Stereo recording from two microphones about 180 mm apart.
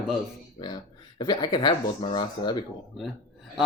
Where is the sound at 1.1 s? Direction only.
25° left (ahead or behind).